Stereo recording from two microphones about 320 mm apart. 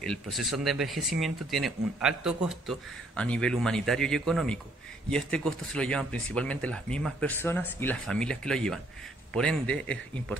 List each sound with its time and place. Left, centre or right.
0.0 s speech: centre